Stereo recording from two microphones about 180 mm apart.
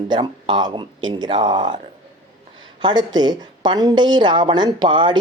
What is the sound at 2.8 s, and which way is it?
A woman's voice, 25° right (ahead or behind).